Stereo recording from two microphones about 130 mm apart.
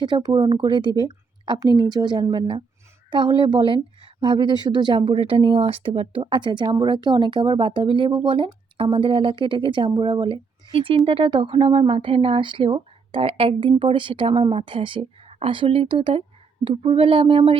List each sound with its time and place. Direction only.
0.0 s speech: 30° right (ahead or behind)